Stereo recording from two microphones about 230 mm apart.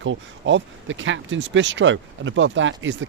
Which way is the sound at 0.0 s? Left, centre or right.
Right.